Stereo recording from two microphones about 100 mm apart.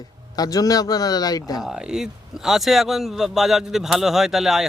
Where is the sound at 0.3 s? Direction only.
40° left (ahead or behind).